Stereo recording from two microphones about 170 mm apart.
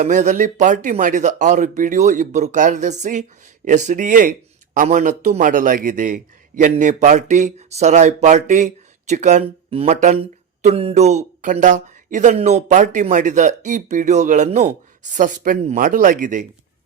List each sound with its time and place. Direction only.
0.0 s speech: 45° right (ahead or behind)